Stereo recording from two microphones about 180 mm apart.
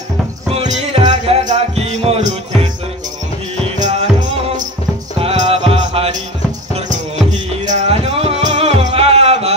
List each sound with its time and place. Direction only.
0.6 s music: 35° right (ahead or behind)
3.8 s music: 35° right (ahead or behind)
5.2 s music: 35° right (ahead or behind)
7.6 s music: 35° right (ahead or behind)